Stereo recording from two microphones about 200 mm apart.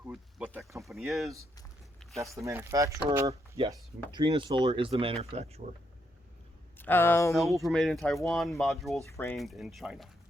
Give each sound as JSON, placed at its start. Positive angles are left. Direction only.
{"t": 0.0, "sound": "a sound", "side_deg": -5}
{"t": 0.8, "sound": "speech", "side_deg": 0}
{"t": 2.4, "sound": "speech", "side_deg": -15}
{"t": 6.7, "sound": "speech", "side_deg": 10}
{"t": 7.6, "sound": "speech", "side_deg": 0}
{"t": 9.0, "sound": "speech", "side_deg": 15}
{"t": 9.3, "sound": "speech", "side_deg": 0}